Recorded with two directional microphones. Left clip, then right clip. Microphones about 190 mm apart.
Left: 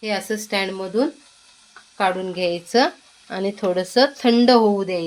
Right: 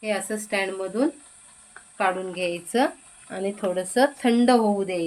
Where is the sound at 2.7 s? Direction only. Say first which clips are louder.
Left 5 dB; 20° left (ahead or behind).